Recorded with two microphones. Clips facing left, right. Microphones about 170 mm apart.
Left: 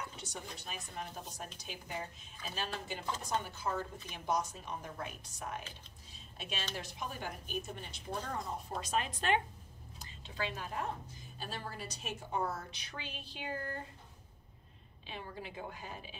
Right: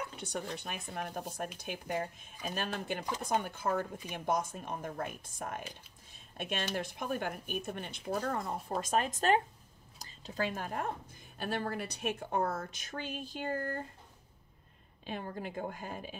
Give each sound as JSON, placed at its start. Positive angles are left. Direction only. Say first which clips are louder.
{"t": 0.2, "sound": "speech", "louder": "right 7 dB", "side_deg": -60}
{"t": 6.1, "sound": "a sound", "louder": "right 6 dB", "side_deg": -55}
{"t": 6.7, "sound": "speech", "louder": "right 7 dB", "side_deg": -55}
{"t": 15.0, "sound": "speech", "louder": "right 6 dB", "side_deg": -50}